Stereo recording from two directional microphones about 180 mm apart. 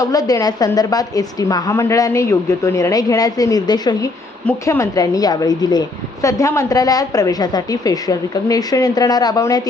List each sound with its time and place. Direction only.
0.0 s a woman's voice: 20° left (ahead or behind)